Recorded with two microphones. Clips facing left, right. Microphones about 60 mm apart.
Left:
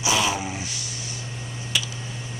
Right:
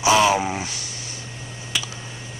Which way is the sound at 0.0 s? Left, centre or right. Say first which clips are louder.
Right 7 dB; right.